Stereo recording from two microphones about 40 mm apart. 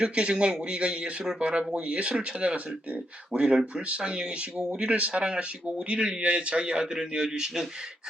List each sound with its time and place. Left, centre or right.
0.0 s speech: right
4.9 s speech: right; by 7.7 s centre